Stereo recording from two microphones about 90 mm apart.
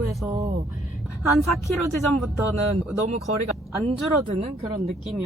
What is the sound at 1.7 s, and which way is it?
Speech, centre (ahead or behind).